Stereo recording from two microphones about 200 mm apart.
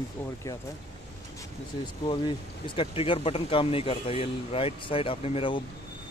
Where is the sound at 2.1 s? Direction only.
25° left (ahead or behind).